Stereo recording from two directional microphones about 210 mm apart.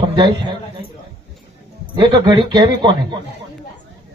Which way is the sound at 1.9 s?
20° right (ahead or behind).